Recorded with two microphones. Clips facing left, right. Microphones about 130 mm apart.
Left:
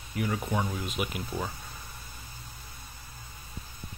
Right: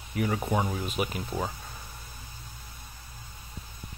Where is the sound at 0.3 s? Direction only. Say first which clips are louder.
Right 2 dB; 25° right (ahead or behind).